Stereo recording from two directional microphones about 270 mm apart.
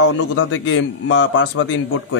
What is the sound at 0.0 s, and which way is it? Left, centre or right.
A man's voice, left.